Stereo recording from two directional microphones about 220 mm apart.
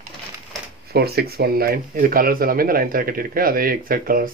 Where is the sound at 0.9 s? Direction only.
45° right (ahead or behind).